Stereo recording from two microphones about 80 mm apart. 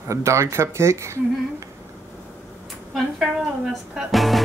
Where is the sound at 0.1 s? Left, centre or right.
Right.